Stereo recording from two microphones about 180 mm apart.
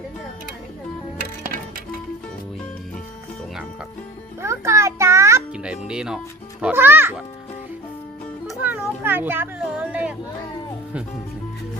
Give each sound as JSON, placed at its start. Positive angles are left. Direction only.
{"t": 4.4, "sound": "music", "side_deg": -15}
{"t": 5.9, "sound": "speech", "side_deg": -5}
{"t": 8.4, "sound": "a sound", "side_deg": -10}